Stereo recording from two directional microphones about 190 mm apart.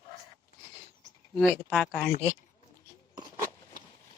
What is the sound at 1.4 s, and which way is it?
Speech, 5° left (ahead or behind).